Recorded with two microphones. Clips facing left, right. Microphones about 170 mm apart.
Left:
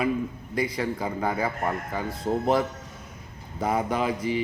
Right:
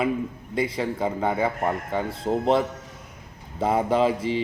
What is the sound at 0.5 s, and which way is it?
A man's voice, 25° right (ahead or behind).